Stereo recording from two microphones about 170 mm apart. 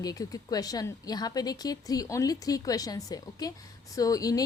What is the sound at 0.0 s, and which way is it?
Speech, 20° left (ahead or behind).